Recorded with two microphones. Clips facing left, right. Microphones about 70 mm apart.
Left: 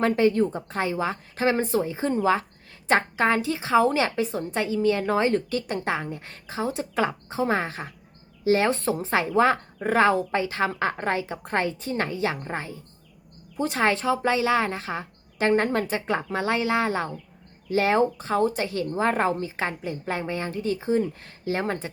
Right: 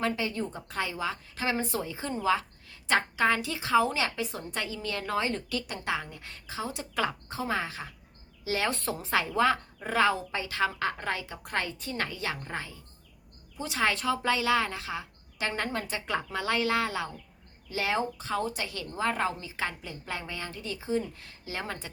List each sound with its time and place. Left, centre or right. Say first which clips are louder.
0.0 s a woman's voice: left 10 dB; left
7.4 s a woman's voice: left 6 dB; left